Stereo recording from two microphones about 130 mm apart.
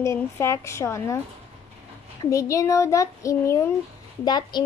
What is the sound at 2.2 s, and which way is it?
A woman's voice, 25° left (ahead or behind).